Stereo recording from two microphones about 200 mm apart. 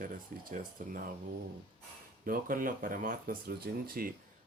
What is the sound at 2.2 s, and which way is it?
Speech, 45° right (ahead or behind).